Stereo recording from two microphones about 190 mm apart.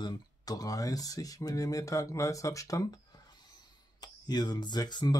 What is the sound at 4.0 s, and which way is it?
Speech, 20° left (ahead or behind).